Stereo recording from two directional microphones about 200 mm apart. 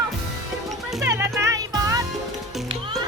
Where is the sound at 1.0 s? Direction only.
15° right (ahead or behind).